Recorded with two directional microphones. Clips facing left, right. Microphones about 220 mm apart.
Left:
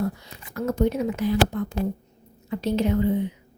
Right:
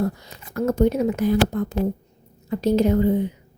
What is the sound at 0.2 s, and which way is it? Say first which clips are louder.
A woman's voice: right 5 dB; 45° right (ahead or behind).